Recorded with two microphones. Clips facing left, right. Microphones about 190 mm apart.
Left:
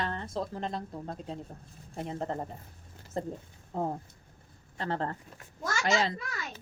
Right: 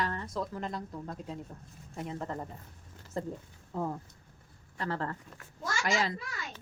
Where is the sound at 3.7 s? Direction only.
40° left (ahead or behind).